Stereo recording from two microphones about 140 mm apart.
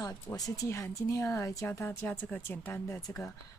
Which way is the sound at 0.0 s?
25° left (ahead or behind).